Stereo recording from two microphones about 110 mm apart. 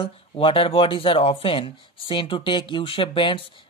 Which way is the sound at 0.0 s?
55° left (ahead or behind).